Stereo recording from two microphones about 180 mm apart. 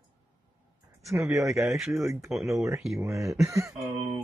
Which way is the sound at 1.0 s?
15° right (ahead or behind).